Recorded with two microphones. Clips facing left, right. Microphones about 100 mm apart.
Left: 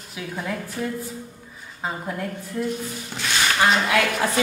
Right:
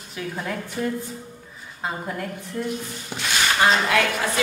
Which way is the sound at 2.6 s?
10° left (ahead or behind).